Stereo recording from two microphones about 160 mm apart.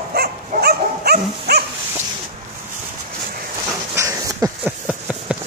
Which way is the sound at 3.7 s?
20° right (ahead or behind).